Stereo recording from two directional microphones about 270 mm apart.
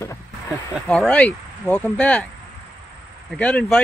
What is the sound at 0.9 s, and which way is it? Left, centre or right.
Speech, centre.